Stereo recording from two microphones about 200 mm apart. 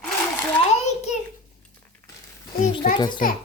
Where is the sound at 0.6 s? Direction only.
35° left (ahead or behind).